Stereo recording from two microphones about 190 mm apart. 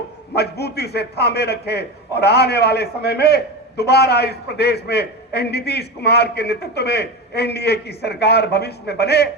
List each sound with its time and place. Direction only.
0.3 s a man's voice: 60° left (ahead or behind)